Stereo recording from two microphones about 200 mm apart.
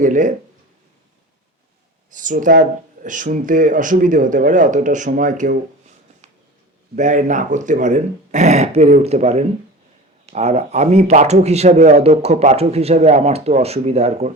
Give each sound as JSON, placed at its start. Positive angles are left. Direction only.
{"t": 0.0, "sound": "speech", "side_deg": -40}
{"t": 2.1, "sound": "speech", "side_deg": -40}
{"t": 6.9, "sound": "speech", "side_deg": -40}